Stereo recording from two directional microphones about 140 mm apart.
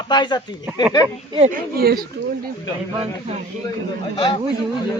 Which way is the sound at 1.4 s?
90° right.